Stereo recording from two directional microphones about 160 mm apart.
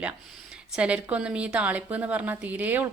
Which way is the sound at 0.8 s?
10° right (ahead or behind).